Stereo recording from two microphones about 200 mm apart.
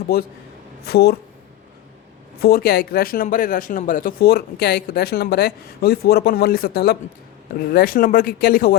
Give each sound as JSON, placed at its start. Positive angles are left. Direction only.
{"t": 0.1, "sound": "speech", "side_deg": 50}
{"t": 2.4, "sound": "speech", "side_deg": 50}